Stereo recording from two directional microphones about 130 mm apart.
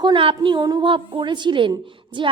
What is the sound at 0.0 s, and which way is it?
A woman's voice, 40° right (ahead or behind).